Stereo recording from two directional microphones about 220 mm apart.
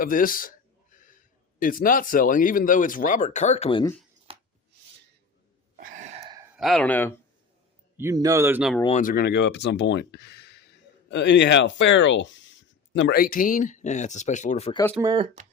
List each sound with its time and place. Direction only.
0.0 s a sound: 40° left (ahead or behind)
1.5 s speech: 40° left (ahead or behind)
4.3 s chopping: 25° right (ahead or behind)
5.7 s a sound: 35° right (ahead or behind)
6.6 s speech: centre (ahead or behind)
7.9 s speech: 15° right (ahead or behind)
9.0 s speech: 40° left (ahead or behind)
15.0 s speech: 20° right (ahead or behind)